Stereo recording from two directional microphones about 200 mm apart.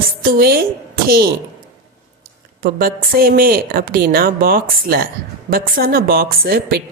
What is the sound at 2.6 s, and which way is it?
A woman's voice, 45° right (ahead or behind).